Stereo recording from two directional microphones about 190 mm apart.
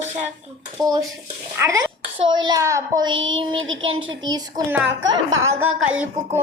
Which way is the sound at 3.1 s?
90° right.